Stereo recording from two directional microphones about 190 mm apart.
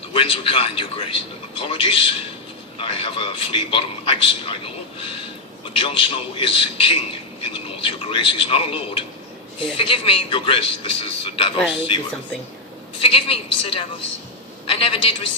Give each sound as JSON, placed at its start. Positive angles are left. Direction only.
{"t": 0.1, "sound": "a man's voice", "side_deg": 30}
{"t": 11.5, "sound": "speech", "side_deg": 5}
{"t": 13.0, "sound": "a man's voice", "side_deg": 30}